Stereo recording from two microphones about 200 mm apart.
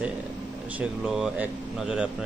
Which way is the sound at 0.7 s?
Centre (ahead or behind).